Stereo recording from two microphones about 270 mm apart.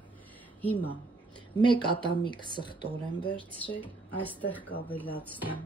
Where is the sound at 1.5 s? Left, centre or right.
Centre.